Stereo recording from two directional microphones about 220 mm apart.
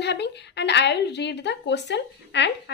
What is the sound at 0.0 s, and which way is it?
A woman's voice, 50° left (ahead or behind).